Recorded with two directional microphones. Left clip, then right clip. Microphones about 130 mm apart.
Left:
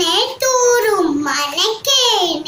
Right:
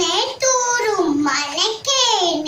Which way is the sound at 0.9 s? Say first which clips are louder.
Left 2 dB; centre (ahead or behind).